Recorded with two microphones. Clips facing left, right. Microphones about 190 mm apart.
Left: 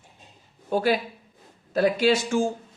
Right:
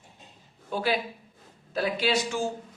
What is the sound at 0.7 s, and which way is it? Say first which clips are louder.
A man's voice: left 5 dB; 50° left (ahead or behind).